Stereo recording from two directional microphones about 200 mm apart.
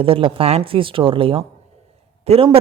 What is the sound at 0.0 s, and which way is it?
A woman's voice, 25° right (ahead or behind).